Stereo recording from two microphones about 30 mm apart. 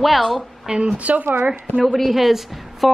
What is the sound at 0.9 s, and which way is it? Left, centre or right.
Speech, right.